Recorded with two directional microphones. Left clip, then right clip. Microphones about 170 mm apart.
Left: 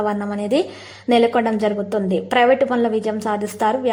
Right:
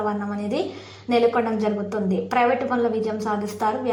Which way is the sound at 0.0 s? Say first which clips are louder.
Left 4 dB; 25° left (ahead or behind).